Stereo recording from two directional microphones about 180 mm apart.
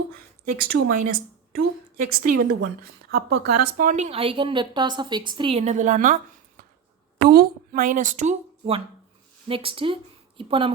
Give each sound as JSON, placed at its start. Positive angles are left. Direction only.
{"t": 0.1, "sound": "a woman's voice", "side_deg": -55}
{"t": 3.9, "sound": "a woman's voice", "side_deg": -35}
{"t": 7.2, "sound": "speech", "side_deg": -60}